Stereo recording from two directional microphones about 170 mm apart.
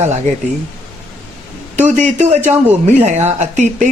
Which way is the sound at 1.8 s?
45° right (ahead or behind).